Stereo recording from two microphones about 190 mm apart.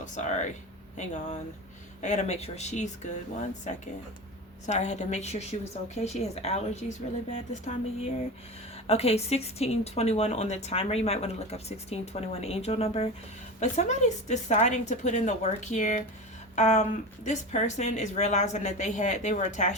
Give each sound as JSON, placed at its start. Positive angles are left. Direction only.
{"t": 0.0, "sound": "speech", "side_deg": 40}
{"t": 8.9, "sound": "speech", "side_deg": 35}